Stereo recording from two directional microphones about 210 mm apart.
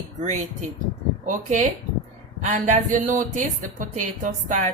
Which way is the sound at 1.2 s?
35° right (ahead or behind).